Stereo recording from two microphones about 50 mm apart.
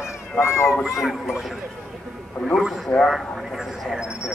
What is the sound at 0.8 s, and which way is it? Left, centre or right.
Speech, centre.